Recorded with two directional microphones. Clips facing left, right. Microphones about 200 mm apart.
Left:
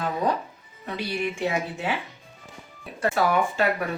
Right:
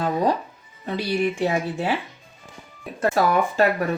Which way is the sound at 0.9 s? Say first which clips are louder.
Right 5 dB; 35° right (ahead or behind).